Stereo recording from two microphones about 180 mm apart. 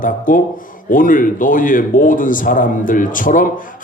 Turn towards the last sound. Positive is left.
turn(degrees=50)  # may be behind; listen again after turning